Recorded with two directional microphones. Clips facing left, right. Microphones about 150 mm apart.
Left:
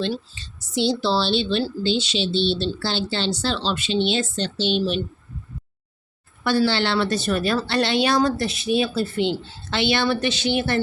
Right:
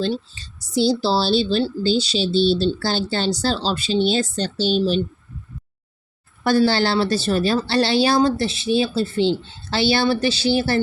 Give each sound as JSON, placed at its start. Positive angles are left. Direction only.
{"t": 0.0, "sound": "a woman's voice", "side_deg": -35}
{"t": 4.8, "sound": "speech", "side_deg": -25}
{"t": 6.4, "sound": "a woman's voice", "side_deg": -40}